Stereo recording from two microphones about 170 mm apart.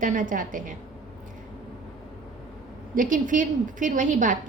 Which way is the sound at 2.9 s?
50° right (ahead or behind).